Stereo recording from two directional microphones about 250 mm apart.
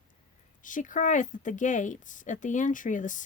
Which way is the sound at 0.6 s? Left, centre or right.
Left.